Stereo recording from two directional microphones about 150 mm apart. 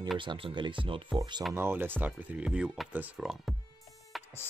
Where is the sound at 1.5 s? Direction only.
15° right (ahead or behind).